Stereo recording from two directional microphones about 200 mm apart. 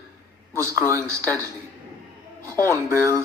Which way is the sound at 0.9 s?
15° right (ahead or behind).